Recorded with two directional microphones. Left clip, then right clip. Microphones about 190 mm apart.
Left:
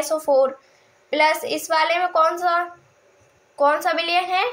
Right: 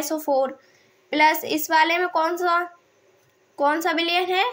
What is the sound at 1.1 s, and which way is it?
A woman's voice, 60° right (ahead or behind).